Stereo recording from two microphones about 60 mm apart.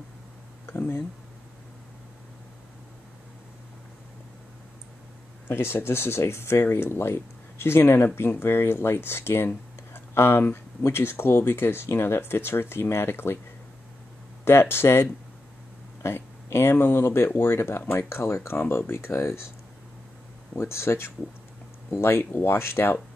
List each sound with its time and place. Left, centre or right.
0.7 s speech: left
5.5 s speech: left
14.4 s speech: left
16.0 s a sound: left
16.8 s speech: left
20.5 s speech: left